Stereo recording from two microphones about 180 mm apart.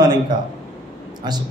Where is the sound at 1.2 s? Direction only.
25° right (ahead or behind).